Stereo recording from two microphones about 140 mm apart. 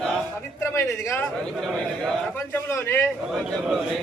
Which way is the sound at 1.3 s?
5° left (ahead or behind).